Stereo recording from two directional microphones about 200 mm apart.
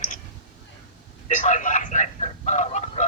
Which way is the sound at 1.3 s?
40° left (ahead or behind).